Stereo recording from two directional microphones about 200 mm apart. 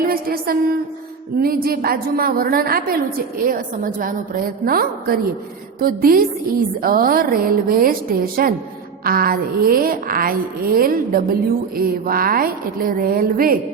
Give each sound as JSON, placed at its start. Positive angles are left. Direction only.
{"t": 0.0, "sound": "a woman's voice", "side_deg": -50}